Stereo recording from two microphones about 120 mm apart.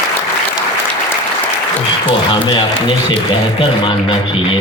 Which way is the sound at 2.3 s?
45° left (ahead or behind).